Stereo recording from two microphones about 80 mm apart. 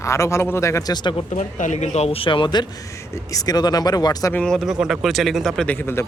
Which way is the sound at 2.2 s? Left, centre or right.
Left.